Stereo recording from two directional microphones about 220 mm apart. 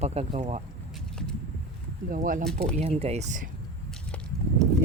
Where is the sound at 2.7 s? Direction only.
30° right (ahead or behind).